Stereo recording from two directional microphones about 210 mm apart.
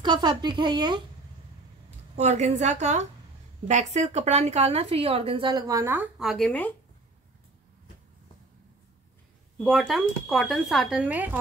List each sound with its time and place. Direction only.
0.0 s a woman's voice: 20° right (ahead or behind)
2.1 s a woman's voice: 30° right (ahead or behind); by 6.7 s 5° left (ahead or behind)
9.6 s speech: centre (ahead or behind)